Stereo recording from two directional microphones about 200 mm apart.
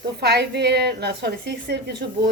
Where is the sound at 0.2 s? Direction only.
55° right (ahead or behind).